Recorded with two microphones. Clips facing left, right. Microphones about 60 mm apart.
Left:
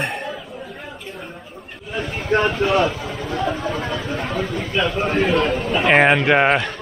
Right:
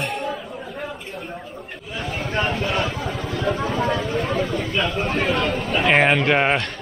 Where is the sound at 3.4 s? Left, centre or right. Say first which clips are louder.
Right 5 dB; centre.